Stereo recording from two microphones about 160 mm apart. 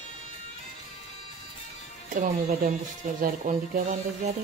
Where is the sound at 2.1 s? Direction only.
55° right (ahead or behind).